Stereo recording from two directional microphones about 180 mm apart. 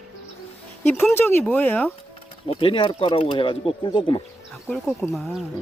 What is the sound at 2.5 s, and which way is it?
Speech, 30° left (ahead or behind).